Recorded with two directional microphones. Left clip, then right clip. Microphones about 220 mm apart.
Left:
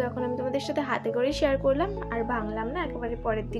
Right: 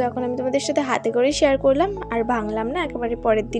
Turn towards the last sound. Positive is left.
turn(degrees=-35)  # may be behind; listen again after turning